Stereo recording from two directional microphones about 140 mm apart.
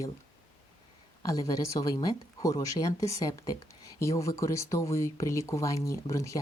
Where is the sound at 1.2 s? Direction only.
25° left (ahead or behind).